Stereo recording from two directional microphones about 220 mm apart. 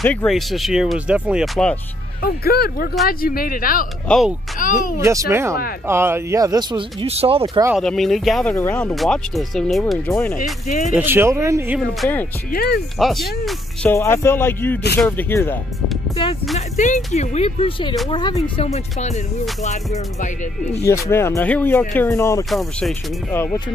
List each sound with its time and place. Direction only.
0.0 s speech: 5° left (ahead or behind)
2.2 s speech: 45° left (ahead or behind)
4.1 s speech: centre (ahead or behind)
4.6 s speech: 40° left (ahead or behind)
5.0 s speech: 15° right (ahead or behind)
7.7 s speech: centre (ahead or behind)
10.0 s speech: 10° left (ahead or behind)
11.0 s speech: 10° right (ahead or behind)
12.5 s speech: 45° left (ahead or behind)
13.0 s speech: centre (ahead or behind)
13.9 s speech: 10° left (ahead or behind)
16.5 s speech: 35° left (ahead or behind)
20.8 s speech: 10° left (ahead or behind)
22.5 s speech: centre (ahead or behind)